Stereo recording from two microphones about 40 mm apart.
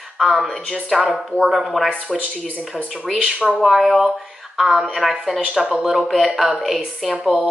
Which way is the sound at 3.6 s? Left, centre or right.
Centre.